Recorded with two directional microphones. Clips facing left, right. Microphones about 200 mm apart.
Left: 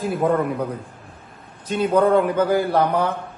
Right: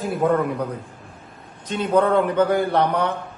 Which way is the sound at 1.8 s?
5° left (ahead or behind).